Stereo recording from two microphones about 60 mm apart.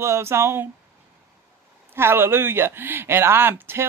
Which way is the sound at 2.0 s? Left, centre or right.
Right.